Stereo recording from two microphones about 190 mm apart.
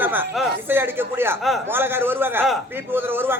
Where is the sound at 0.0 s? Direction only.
10° right (ahead or behind).